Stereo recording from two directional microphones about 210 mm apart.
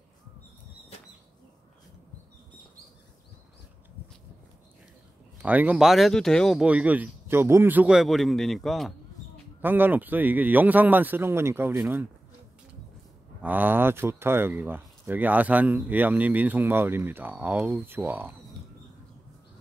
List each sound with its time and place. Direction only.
5.4 s speech: 5° right (ahead or behind)
13.4 s speech: 10° right (ahead or behind)